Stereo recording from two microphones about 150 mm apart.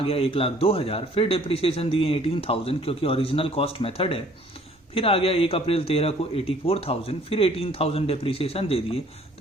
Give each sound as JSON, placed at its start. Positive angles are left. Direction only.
{"t": 0.0, "sound": "speech", "side_deg": 40}